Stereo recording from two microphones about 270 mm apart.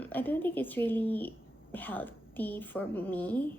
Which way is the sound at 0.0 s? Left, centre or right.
Centre.